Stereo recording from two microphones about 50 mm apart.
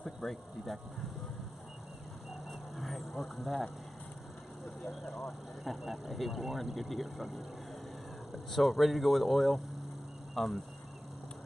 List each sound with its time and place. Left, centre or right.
0.0 s speech: centre
2.7 s speech: centre
5.2 s speech: centre
8.5 s speech: centre